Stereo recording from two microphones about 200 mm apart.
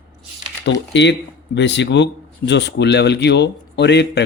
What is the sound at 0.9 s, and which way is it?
Speech, 60° left (ahead or behind).